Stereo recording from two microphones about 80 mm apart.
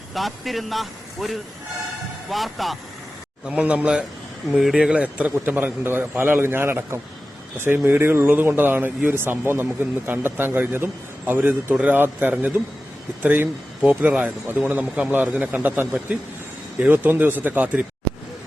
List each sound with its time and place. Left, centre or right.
0.1 s speech: centre
3.4 s a man's voice: centre